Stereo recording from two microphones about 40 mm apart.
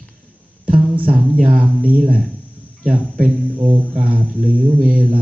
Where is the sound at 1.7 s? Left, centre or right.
Right.